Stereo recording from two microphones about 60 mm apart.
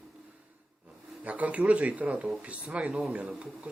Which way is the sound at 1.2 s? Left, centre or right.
Right.